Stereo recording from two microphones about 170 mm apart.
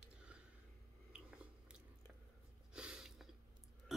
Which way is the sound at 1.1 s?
5° right (ahead or behind).